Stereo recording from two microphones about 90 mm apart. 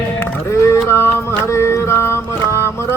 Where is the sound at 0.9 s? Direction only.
30° left (ahead or behind).